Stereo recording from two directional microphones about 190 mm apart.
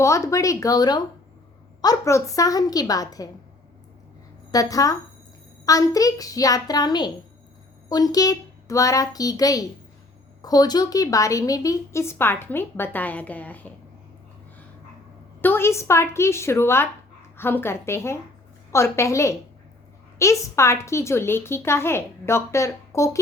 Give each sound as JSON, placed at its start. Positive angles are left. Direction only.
{"t": 0.0, "sound": "a woman's voice", "side_deg": 15}
{"t": 4.5, "sound": "a woman's voice", "side_deg": 20}
{"t": 15.4, "sound": "a woman's voice", "side_deg": 10}